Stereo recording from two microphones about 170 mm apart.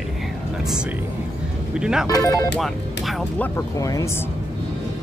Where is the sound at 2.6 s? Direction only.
Centre (ahead or behind); by 4.1 s 20° left (ahead or behind).